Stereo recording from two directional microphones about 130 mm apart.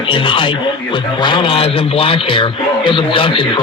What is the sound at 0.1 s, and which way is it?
A man's voice, 40° left (ahead or behind).